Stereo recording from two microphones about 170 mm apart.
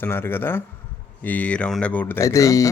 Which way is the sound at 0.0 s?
15° left (ahead or behind).